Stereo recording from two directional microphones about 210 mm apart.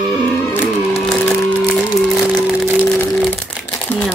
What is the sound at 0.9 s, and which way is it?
Music, 5° left (ahead or behind).